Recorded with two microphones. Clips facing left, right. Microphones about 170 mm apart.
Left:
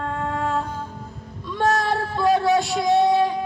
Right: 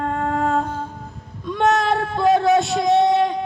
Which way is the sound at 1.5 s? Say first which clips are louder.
Right 3 dB; 20° right (ahead or behind).